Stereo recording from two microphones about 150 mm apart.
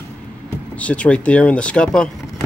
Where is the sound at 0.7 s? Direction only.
10° left (ahead or behind).